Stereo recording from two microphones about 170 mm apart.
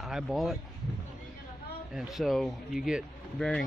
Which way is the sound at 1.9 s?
Centre (ahead or behind).